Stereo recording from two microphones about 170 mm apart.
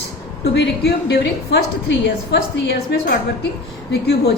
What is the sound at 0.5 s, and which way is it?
A woman's voice, 80° left.